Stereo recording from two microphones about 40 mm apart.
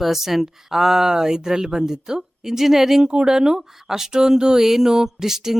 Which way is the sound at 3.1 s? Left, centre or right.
Right.